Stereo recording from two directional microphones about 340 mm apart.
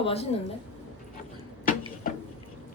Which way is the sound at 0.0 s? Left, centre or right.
Centre.